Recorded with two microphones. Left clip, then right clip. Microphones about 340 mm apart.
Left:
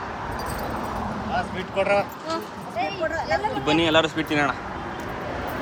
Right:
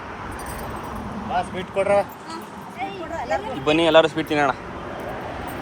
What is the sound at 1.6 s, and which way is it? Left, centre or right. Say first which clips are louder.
Speech: right 2 dB; centre.